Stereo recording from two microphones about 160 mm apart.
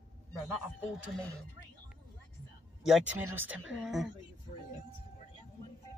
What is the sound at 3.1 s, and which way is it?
Speech, 15° right (ahead or behind).